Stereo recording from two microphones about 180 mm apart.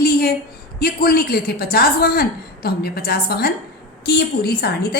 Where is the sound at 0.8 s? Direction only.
60° left (ahead or behind).